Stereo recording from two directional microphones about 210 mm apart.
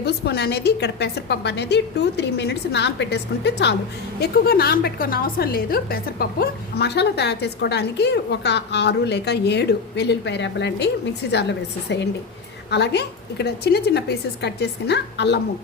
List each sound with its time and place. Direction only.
0.0 s a woman's voice: 50° left (ahead or behind)